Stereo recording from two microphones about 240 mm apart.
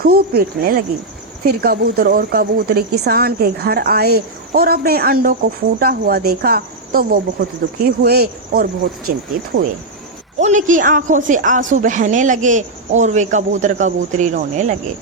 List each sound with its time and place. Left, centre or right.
0.0 s speech: right
10.4 s speech: right